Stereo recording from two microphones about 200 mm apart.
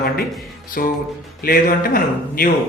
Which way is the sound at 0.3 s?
Centre (ahead or behind).